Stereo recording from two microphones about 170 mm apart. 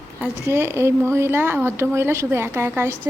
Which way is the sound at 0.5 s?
15° right (ahead or behind).